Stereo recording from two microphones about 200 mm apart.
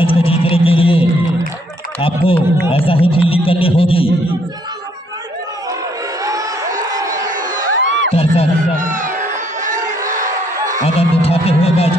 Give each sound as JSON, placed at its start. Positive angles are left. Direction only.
{"t": 0.0, "sound": "a sound", "side_deg": 30}
{"t": 2.0, "sound": "speech", "side_deg": 25}
{"t": 7.1, "sound": "crowd", "side_deg": -40}
{"t": 7.7, "sound": "crowd", "side_deg": -65}
{"t": 8.1, "sound": "music", "side_deg": 30}
{"t": 8.7, "sound": "crowd", "side_deg": -40}
{"t": 10.9, "sound": "music", "side_deg": 30}